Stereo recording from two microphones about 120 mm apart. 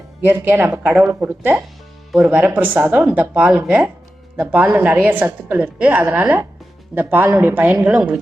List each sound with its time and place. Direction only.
0.3 s a woman's voice: 15° right (ahead or behind)